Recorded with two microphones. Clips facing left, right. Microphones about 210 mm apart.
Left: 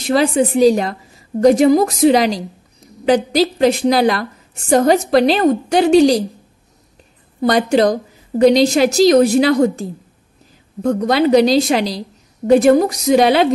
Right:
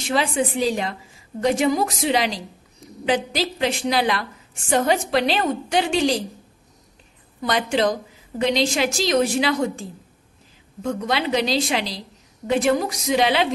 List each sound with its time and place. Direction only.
0.0 s a woman's voice: 40° left (ahead or behind)
7.3 s a woman's voice: 40° left (ahead or behind)